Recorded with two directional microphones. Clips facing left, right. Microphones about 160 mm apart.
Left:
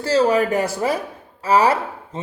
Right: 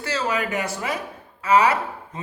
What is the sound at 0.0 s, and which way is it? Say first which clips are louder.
Speech: left 9 dB; 35° left (ahead or behind).